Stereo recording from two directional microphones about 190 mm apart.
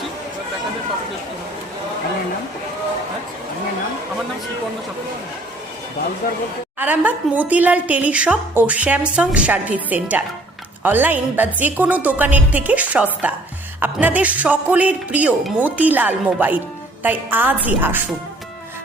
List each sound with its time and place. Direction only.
6.2 s speech: 50° left (ahead or behind)
6.7 s a woman's voice: 10° right (ahead or behind)